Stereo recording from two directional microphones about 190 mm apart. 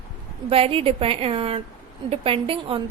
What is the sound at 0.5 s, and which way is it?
A woman's voice, 30° right (ahead or behind).